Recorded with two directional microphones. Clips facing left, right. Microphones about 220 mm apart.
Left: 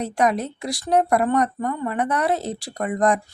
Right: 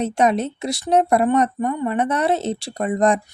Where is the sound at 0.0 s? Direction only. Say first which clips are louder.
Right 3 dB; 25° right (ahead or behind).